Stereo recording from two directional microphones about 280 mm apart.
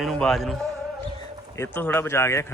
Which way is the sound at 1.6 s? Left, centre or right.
Centre.